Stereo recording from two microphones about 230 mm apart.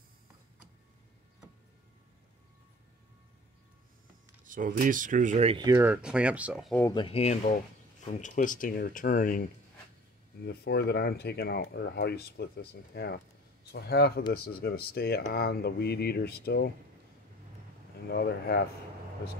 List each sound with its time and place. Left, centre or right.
4.5 s speech: right; by 6.8 s centre
6.8 s speech: centre; by 9.4 s left
10.4 s speech: left
18.0 s speech: left